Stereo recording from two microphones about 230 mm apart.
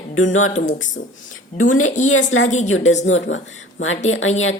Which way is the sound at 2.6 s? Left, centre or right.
Left.